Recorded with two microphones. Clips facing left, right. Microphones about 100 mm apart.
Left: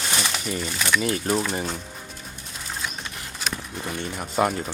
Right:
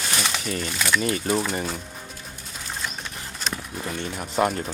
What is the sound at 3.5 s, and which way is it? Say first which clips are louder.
Speech: even; centre (ahead or behind).